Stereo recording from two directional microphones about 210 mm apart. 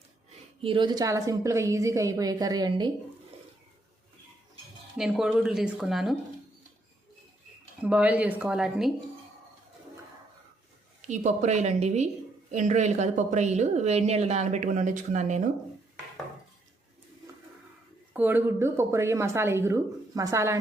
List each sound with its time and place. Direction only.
0.6 s a woman's voice: 25° right (ahead or behind)
4.9 s speech: centre (ahead or behind)
7.8 s speech: 5° right (ahead or behind)
11.0 s a woman's voice: 35° right (ahead or behind)
18.1 s a woman's voice: 10° right (ahead or behind)